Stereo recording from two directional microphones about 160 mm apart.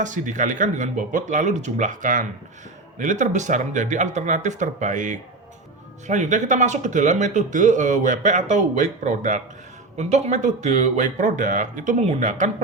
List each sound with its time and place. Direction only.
0.0 s speech: 50° right (ahead or behind)